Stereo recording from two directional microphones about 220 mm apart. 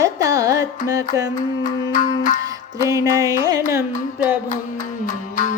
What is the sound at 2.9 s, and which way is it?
Music, 15° right (ahead or behind).